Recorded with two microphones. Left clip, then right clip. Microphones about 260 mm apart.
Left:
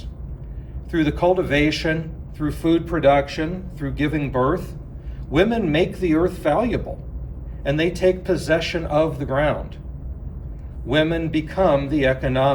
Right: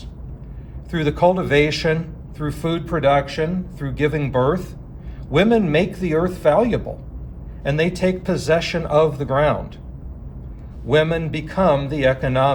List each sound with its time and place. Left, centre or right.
0.9 s a man's voice: right
10.8 s a man's voice: right